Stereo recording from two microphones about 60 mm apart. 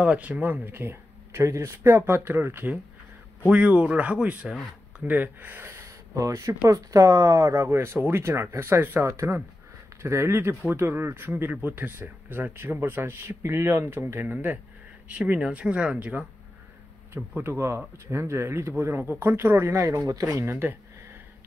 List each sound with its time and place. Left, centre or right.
0.0 s speech: right
3.4 s speech: right
5.0 s speech: right
5.7 s speech: right
9.0 s speech: right
13.4 s speech: right
14.3 s speech: right
17.4 s speech: right
19.7 s speech: right